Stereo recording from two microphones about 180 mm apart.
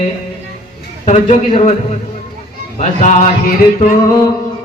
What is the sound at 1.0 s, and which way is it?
Speech, 40° left (ahead or behind).